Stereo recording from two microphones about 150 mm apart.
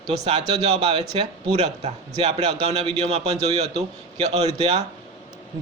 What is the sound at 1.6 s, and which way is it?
A man's voice, 45° right (ahead or behind).